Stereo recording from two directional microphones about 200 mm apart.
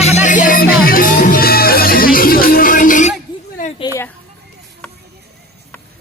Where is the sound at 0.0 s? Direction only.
35° left (ahead or behind).